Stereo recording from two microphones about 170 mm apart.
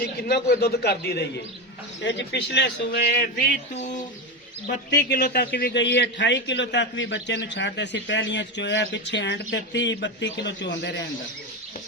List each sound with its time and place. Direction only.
0.0 s a man's voice: 70° left (ahead or behind)
2.0 s a man's voice: 90° left
4.9 s a man's voice: 75° left (ahead or behind); by 11.0 s 90° left